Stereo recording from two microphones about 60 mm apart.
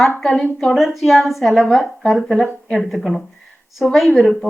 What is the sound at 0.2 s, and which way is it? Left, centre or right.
A woman's voice, centre.